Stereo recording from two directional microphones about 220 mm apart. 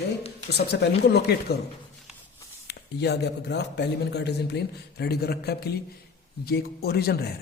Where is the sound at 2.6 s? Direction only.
50° left (ahead or behind).